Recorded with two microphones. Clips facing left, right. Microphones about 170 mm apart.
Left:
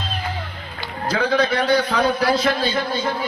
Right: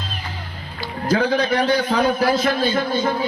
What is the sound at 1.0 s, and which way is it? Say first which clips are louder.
A man's voice: right 1 dB; 45° right (ahead or behind).